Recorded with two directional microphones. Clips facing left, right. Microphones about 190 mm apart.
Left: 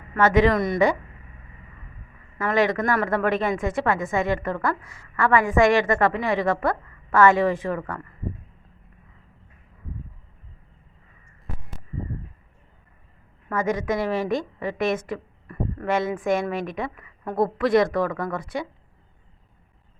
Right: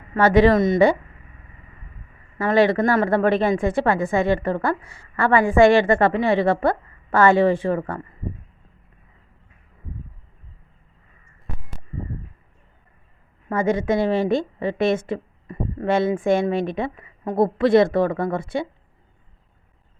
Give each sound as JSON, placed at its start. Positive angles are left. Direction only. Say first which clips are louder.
{"t": 0.2, "sound": "speech", "louder": "right 4 dB", "side_deg": -35}
{"t": 2.4, "sound": "speech", "louder": "right 5 dB", "side_deg": -30}
{"t": 13.5, "sound": "a woman's voice", "louder": "right 4 dB", "side_deg": -30}